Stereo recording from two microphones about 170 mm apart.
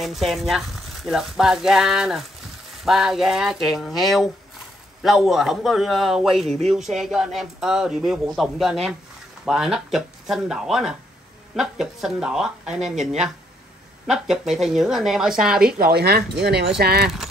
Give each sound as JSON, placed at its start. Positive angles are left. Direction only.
{"t": 0.0, "sound": "speech", "side_deg": 0}
{"t": 12.9, "sound": "speech", "side_deg": -45}
{"t": 14.0, "sound": "speech", "side_deg": 0}
{"t": 15.6, "sound": "speech", "side_deg": -65}